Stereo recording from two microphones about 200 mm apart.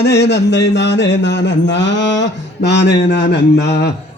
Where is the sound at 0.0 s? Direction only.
55° left (ahead or behind).